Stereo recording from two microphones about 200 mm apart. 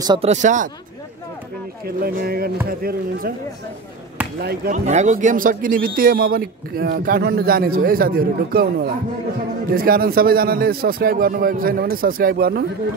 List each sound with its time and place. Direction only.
0.0 s speech: 20° right (ahead or behind)
0.3 s a man's voice: 40° right (ahead or behind)
2.0 s a man's voice: 50° right (ahead or behind)
4.4 s a man's voice: 50° right (ahead or behind)
4.7 s a man's voice: 35° right (ahead or behind)